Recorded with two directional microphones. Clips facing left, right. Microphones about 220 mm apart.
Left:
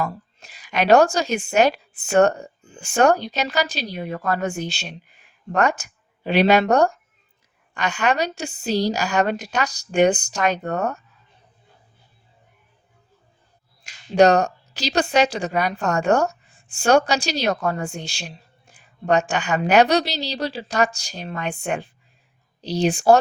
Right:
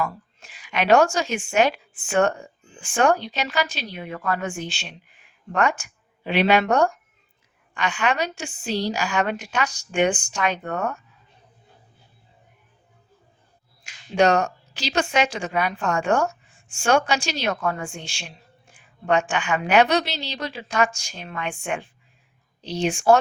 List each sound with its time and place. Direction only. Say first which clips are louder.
0.0 s a woman's voice: left 1 dB; 40° left (ahead or behind)
13.8 s a woman's voice: left 4 dB; 35° left (ahead or behind)